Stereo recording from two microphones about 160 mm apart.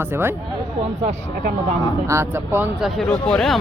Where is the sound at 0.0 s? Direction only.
15° right (ahead or behind).